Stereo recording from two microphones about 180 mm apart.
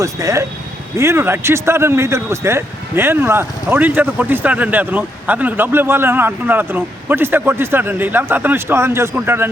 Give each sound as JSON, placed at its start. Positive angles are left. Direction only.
{"t": 0.0, "sound": "speech", "side_deg": -15}